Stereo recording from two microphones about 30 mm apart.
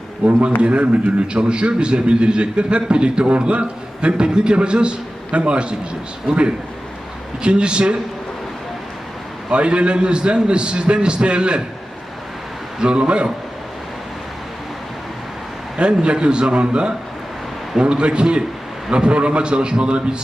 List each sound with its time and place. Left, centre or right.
0.3 s a man's voice: right
7.4 s a man's voice: right
9.5 s a man's voice: right
12.8 s a man's voice: right
15.8 s a man's voice: right